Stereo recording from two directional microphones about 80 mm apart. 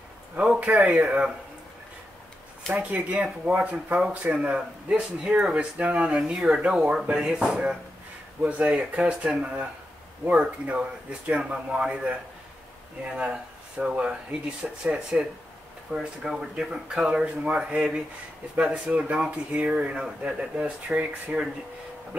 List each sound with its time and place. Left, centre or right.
0.4 s speech: centre
2.7 s speech: centre